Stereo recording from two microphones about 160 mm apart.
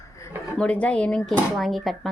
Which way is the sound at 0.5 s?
5° left (ahead or behind).